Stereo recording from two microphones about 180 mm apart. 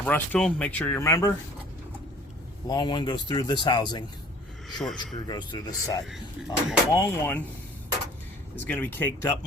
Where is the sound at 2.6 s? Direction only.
25° left (ahead or behind).